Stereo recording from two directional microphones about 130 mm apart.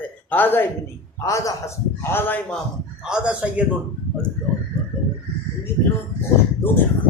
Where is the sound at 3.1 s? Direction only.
10° right (ahead or behind).